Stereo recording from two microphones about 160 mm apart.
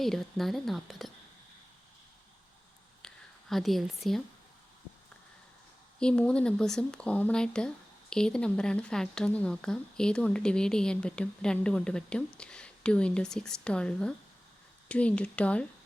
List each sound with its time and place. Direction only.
0.0 s speech: centre (ahead or behind)
3.0 s whispering: 5° left (ahead or behind)
3.5 s speech: centre (ahead or behind)
6.0 s speech: 5° left (ahead or behind)